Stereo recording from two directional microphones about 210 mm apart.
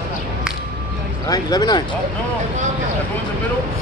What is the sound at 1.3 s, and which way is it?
Speech, 20° left (ahead or behind).